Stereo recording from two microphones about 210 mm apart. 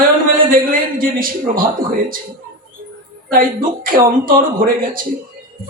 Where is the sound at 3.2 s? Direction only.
40° right (ahead or behind).